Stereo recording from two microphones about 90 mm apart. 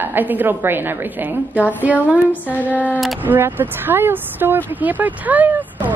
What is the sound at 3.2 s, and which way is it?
A woman's voice, 20° right (ahead or behind).